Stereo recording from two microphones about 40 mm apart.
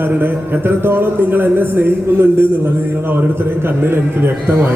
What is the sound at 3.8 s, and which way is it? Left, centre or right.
Speech, right.